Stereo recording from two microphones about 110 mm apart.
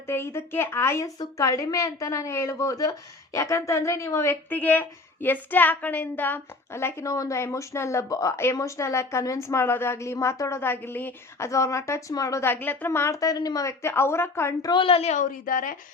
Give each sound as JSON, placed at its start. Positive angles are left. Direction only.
{"t": 0.1, "sound": "speech", "side_deg": 20}
{"t": 14.6, "sound": "a woman's voice", "side_deg": 40}
{"t": 14.8, "sound": "a woman's voice", "side_deg": 70}